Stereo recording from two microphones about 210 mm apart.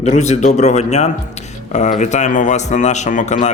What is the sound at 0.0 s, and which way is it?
A man's voice, 30° left (ahead or behind).